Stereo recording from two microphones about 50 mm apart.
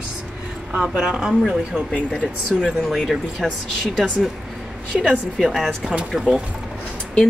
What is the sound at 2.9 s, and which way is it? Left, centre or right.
Speech, centre.